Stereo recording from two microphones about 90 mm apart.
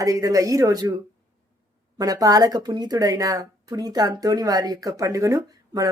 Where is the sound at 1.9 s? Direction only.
45° right (ahead or behind).